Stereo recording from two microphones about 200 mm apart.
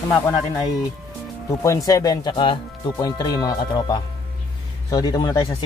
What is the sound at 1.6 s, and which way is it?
Speech, 15° left (ahead or behind).